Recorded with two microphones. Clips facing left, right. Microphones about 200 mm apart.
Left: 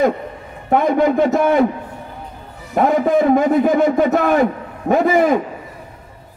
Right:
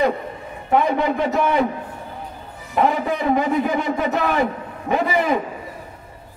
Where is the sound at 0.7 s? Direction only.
45° left (ahead or behind).